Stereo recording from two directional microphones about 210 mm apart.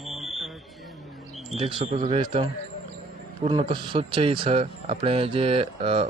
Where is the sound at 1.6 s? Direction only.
25° right (ahead or behind).